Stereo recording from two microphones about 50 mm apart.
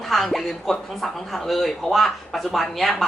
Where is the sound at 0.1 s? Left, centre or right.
Centre.